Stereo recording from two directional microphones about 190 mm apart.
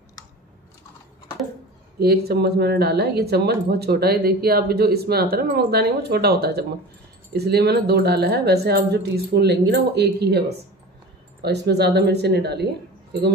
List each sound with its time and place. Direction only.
2.0 s speech: 55° right (ahead or behind)
11.4 s speech: 60° right (ahead or behind)